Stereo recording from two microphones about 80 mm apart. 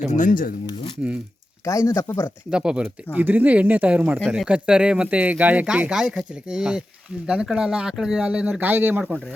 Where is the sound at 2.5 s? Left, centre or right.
Centre.